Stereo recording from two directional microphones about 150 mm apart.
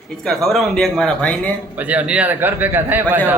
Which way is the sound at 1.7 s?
10° right (ahead or behind).